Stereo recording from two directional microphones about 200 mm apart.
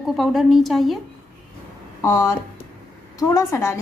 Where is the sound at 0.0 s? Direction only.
Centre (ahead or behind).